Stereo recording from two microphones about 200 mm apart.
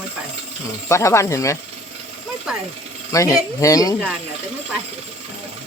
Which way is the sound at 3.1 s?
15° left (ahead or behind).